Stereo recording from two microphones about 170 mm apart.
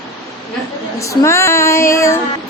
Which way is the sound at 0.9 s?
15° left (ahead or behind).